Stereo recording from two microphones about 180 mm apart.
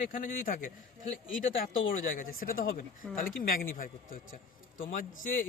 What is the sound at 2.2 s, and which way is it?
Speech, 50° left (ahead or behind).